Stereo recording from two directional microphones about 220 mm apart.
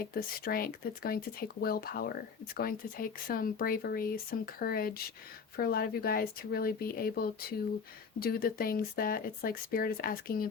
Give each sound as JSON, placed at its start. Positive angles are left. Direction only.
{"t": 0.0, "sound": "speech", "side_deg": 40}